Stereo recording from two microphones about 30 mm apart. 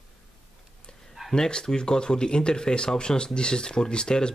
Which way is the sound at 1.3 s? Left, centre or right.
Left.